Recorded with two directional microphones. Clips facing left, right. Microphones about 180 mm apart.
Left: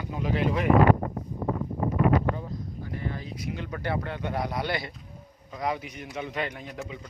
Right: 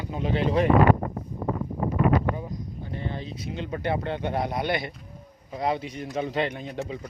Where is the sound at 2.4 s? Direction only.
15° right (ahead or behind).